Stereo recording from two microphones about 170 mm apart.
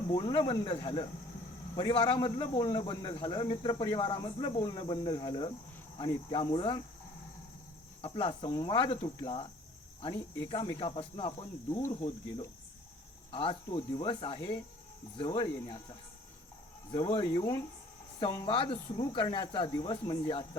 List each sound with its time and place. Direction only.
0.1 s speech: 30° left (ahead or behind)
8.0 s speech: 30° left (ahead or behind)
13.3 s speech: 30° left (ahead or behind)
16.9 s speech: 30° left (ahead or behind)